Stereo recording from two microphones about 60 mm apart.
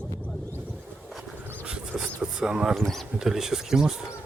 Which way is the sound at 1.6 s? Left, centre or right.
Centre.